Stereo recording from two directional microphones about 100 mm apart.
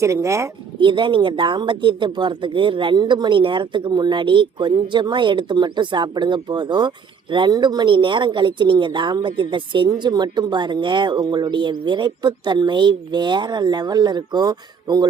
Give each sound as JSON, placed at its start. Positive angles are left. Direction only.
{"t": 0.0, "sound": "speech", "side_deg": -30}
{"t": 0.8, "sound": "speech", "side_deg": -55}